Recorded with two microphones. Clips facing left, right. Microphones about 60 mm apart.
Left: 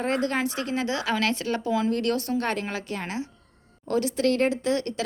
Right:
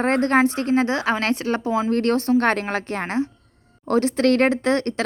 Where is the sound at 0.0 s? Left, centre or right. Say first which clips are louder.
Right 8 dB; right.